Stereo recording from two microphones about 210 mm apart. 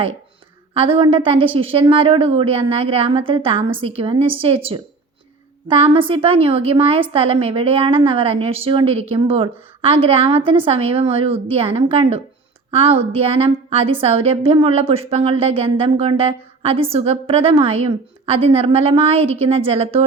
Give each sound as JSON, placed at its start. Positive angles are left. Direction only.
{"t": 0.7, "sound": "a woman's voice", "side_deg": -25}